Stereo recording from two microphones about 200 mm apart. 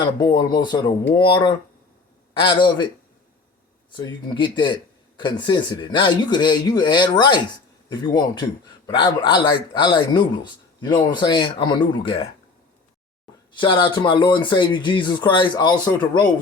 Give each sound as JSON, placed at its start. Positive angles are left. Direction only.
{"t": 0.0, "sound": "a man's voice", "side_deg": 20}
{"t": 3.9, "sound": "a man's voice", "side_deg": 25}
{"t": 13.6, "sound": "a man's voice", "side_deg": 25}